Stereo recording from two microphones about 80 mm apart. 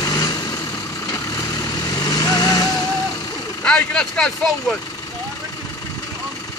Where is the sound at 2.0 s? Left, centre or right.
Left.